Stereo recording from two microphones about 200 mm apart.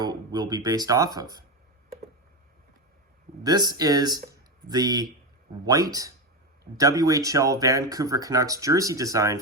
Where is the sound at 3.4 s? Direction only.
20° right (ahead or behind).